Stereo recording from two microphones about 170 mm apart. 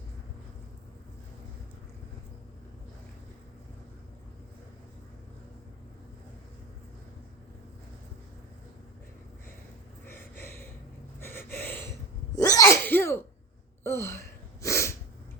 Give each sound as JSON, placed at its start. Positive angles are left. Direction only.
{"t": 10.1, "sound": "a sound", "side_deg": 15}
{"t": 11.2, "sound": "gasp", "side_deg": 15}
{"t": 12.5, "sound": "sneeze", "side_deg": 15}